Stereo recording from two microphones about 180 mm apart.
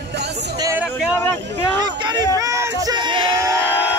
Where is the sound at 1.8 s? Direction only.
25° right (ahead or behind).